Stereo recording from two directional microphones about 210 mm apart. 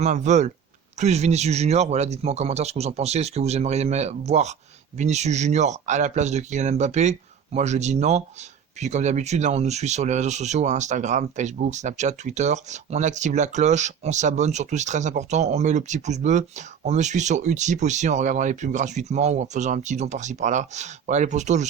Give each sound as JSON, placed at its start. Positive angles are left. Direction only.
{"t": 0.0, "sound": "speech", "side_deg": -35}